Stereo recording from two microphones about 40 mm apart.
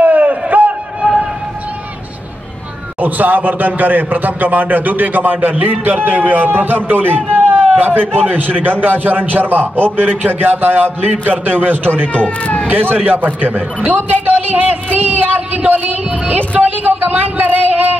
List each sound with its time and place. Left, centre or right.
0.0 s a sound: right
3.0 s a man's voice: right
12.1 s speech: left
12.6 s a man's voice: right